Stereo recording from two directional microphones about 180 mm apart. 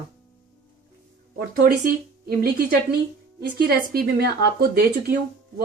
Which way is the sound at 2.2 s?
55° right (ahead or behind).